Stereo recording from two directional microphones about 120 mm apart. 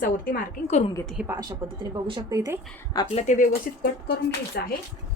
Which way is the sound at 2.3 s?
30° right (ahead or behind).